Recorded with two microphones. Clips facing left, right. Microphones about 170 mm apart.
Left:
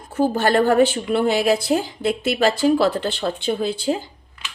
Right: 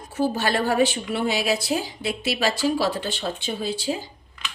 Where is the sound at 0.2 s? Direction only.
50° left (ahead or behind).